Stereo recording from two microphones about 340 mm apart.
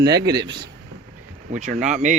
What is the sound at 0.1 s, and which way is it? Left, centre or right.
Speech, right.